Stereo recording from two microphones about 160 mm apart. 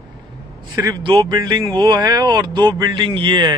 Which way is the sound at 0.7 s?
25° right (ahead or behind).